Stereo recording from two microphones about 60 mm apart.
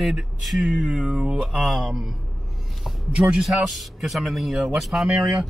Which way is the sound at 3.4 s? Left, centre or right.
Centre.